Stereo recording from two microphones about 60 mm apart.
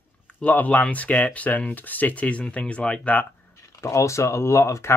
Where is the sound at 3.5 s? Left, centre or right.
Left.